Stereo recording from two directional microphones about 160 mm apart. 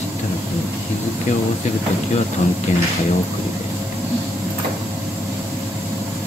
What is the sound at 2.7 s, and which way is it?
Speech, 50° left (ahead or behind).